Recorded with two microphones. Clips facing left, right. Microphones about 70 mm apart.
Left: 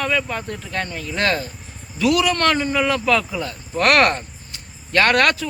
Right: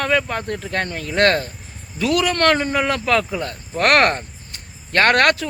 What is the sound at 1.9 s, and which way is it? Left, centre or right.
Speech, right.